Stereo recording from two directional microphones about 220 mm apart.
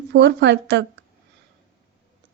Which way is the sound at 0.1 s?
50° right (ahead or behind).